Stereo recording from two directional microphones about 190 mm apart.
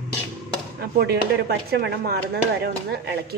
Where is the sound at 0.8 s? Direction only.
55° right (ahead or behind).